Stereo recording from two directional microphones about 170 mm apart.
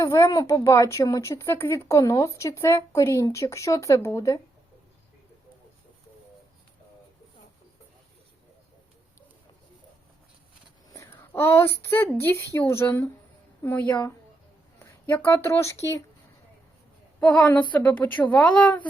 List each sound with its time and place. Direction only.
0.0 s speech: 20° left (ahead or behind)
10.9 s a woman's voice: 15° left (ahead or behind)
17.2 s speech: 5° left (ahead or behind)